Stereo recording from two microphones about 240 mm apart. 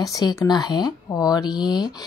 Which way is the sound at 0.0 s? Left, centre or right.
Centre.